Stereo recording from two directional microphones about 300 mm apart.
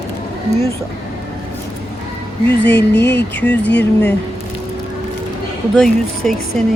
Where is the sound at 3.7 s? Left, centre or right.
Left.